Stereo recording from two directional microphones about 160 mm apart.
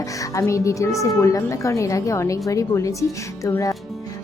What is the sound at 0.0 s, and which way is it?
Music, 20° left (ahead or behind).